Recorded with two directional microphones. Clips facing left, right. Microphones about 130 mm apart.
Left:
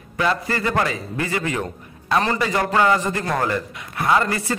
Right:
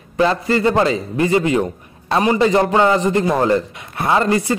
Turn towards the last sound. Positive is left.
turn(degrees=-20)  # may be behind; listen again after turning